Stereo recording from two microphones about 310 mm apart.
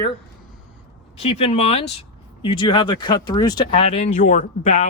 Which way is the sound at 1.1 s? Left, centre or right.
Centre.